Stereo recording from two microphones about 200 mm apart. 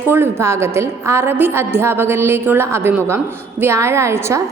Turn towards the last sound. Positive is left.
turn(degrees=-15)  # may be behind; listen again after turning